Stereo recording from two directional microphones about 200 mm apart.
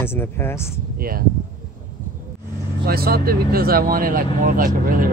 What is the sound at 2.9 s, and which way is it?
Speech, 50° right (ahead or behind).